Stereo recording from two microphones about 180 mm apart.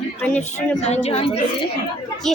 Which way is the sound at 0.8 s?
35° left (ahead or behind).